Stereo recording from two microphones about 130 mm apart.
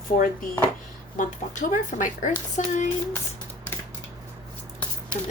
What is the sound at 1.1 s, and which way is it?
Speech, 90° left.